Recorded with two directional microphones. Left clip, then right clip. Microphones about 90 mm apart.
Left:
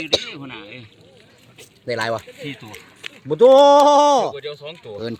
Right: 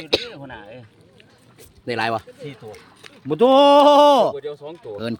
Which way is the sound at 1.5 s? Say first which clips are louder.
Even; 50° right (ahead or behind).